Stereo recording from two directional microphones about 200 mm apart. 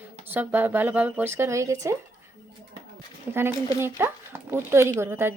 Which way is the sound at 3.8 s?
10° right (ahead or behind).